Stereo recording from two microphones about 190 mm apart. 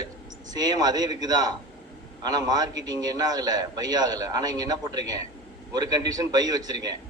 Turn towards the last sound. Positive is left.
turn(degrees=-20)  # may be behind; listen again after turning